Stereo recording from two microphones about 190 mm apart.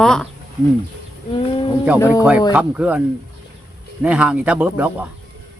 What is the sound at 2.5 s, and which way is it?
Speech, 10° right (ahead or behind).